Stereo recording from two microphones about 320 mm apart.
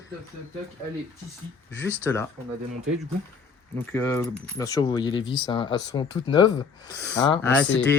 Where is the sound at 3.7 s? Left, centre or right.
Centre.